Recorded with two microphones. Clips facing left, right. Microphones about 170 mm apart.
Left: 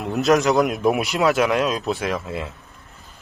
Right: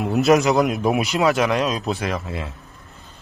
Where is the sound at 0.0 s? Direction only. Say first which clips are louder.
Right 2 dB; 5° right (ahead or behind).